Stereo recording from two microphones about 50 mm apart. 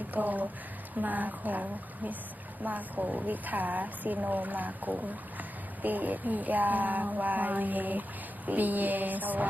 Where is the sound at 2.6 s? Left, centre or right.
Right.